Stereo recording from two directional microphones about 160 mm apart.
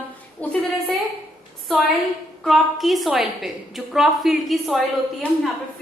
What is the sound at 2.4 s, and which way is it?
A woman's voice, centre (ahead or behind).